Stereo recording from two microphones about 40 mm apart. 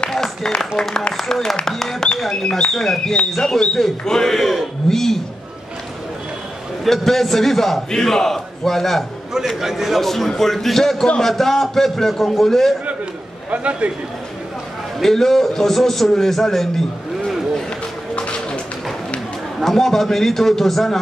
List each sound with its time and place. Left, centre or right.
0.1 s a sound: centre
0.8 s a man's voice: centre
1.1 s a man's voice: centre
6.8 s a man's voice: centre
9.6 s a man's voice: centre
10.0 s a man's voice: centre
13.5 s a man's voice: right
15.0 s a man's voice: centre
18.1 s music: left
19.6 s a man's voice: centre